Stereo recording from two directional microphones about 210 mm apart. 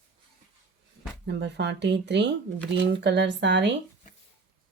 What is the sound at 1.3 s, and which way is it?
Speech, 55° right (ahead or behind).